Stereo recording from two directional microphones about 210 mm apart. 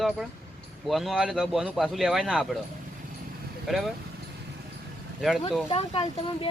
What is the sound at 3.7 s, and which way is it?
Speech, centre (ahead or behind).